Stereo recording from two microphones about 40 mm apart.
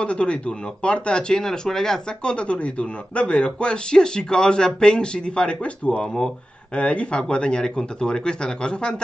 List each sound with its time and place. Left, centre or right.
0.0 s a man's voice: left; by 2.0 s centre
2.2 s a man's voice: left